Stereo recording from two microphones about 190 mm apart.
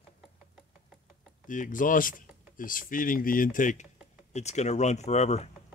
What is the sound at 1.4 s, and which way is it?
Speech, 45° left (ahead or behind).